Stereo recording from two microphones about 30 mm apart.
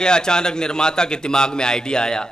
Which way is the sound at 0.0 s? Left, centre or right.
Left.